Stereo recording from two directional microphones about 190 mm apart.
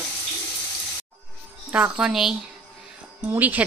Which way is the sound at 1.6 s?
10° right (ahead or behind).